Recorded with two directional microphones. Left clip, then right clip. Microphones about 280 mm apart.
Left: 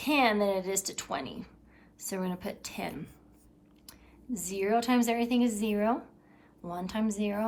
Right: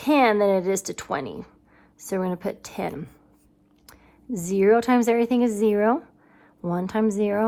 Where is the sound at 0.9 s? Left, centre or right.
Right.